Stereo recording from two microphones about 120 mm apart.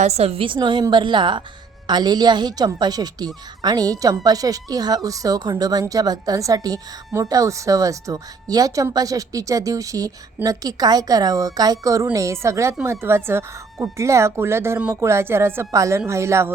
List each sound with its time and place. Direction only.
0.0 s a woman's voice: 60° right (ahead or behind); by 16.5 s 25° right (ahead or behind)